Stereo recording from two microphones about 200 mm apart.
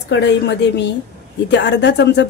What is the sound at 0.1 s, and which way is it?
Speech, 60° left (ahead or behind).